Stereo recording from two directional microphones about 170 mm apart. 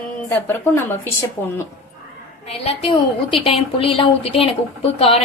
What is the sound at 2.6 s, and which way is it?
A woman's voice, 35° left (ahead or behind).